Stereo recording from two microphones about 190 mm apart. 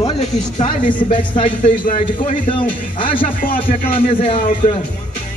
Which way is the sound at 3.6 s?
30° left (ahead or behind).